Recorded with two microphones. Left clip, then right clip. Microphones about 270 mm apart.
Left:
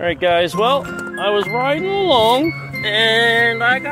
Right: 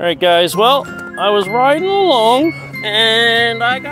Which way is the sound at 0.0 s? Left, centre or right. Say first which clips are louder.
Right 4 dB; right.